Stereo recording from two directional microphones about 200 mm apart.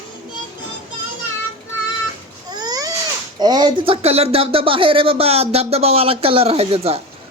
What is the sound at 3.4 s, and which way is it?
Speech, 20° right (ahead or behind).